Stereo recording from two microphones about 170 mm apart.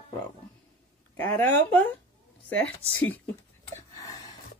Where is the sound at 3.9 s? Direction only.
20° left (ahead or behind).